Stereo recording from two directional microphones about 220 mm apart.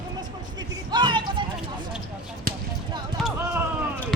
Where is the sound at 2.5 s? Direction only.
40° right (ahead or behind).